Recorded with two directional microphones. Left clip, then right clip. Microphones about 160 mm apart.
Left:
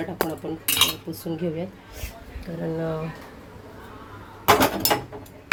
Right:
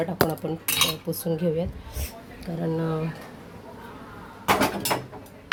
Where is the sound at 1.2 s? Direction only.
20° right (ahead or behind).